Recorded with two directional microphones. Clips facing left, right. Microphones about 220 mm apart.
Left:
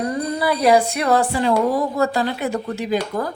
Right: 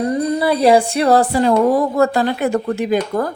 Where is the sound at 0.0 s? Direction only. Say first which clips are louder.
Right 5 dB; 25° right (ahead or behind).